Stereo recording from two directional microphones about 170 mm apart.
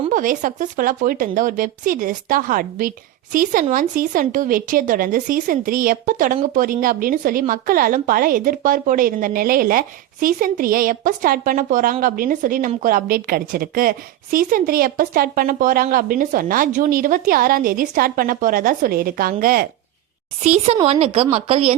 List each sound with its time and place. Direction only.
0.1 s a woman's voice: 50° right (ahead or behind)
20.4 s a woman's voice: 40° right (ahead or behind)